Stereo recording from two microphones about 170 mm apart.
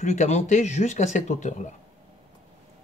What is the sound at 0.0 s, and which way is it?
Speech, 45° left (ahead or behind).